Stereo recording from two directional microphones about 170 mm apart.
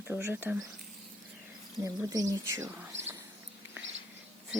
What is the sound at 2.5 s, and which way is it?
Speech, 15° right (ahead or behind).